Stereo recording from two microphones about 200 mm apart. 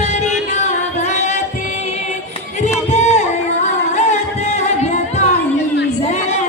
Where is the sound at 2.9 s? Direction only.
35° left (ahead or behind).